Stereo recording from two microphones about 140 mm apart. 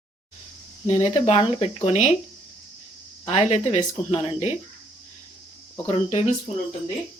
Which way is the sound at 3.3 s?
50° left (ahead or behind).